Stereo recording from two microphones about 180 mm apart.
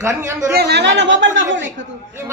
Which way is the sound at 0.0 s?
15° right (ahead or behind).